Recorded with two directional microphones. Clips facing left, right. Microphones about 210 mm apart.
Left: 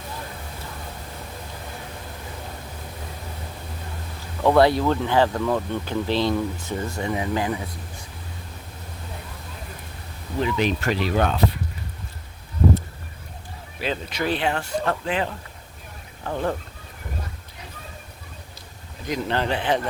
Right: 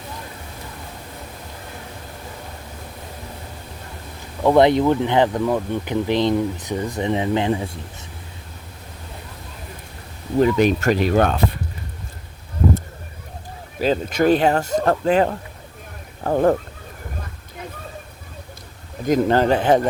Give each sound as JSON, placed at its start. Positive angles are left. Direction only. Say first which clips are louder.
{"t": 4.4, "sound": "speech", "louder": "right 3 dB", "side_deg": -20}
{"t": 10.4, "sound": "speech", "louder": "right 7 dB", "side_deg": -45}
{"t": 13.7, "sound": "speech", "louder": "right 8 dB", "side_deg": -40}
{"t": 19.0, "sound": "speech", "louder": "right 8 dB", "side_deg": -45}